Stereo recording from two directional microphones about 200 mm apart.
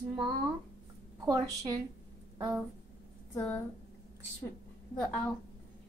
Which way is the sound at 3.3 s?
10° left (ahead or behind).